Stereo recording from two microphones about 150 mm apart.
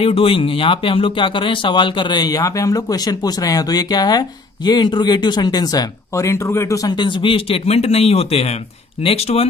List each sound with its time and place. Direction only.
0.0 s speech: 40° left (ahead or behind)